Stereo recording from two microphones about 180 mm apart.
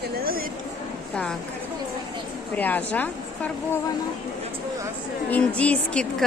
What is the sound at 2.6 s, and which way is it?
Speech, 10° left (ahead or behind).